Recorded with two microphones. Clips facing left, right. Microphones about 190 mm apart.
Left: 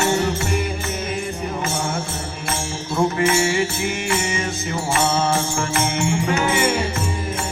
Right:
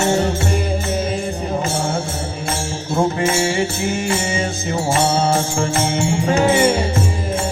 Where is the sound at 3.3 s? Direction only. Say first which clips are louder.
Right 1 dB; 30° right (ahead or behind).